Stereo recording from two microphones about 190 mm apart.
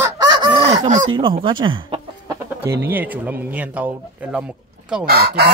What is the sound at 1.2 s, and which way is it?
Speech, 25° right (ahead or behind).